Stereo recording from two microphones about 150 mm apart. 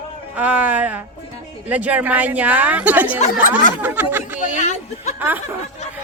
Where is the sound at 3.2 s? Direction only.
65° left (ahead or behind).